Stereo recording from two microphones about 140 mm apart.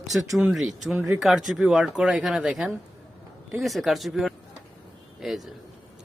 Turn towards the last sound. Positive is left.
turn(degrees=0)  # may be behind; listen again after turning